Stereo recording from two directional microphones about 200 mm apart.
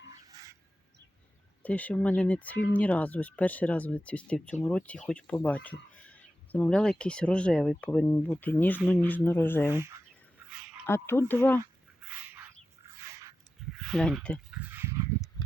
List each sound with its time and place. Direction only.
0.1 s a sound: 15° right (ahead or behind)
1.6 s speech: 5° left (ahead or behind)
9.7 s speech: 15° right (ahead or behind)
10.8 s speech: 10° left (ahead or behind)
12.0 s a sound: 10° right (ahead or behind)
13.7 s speech: centre (ahead or behind)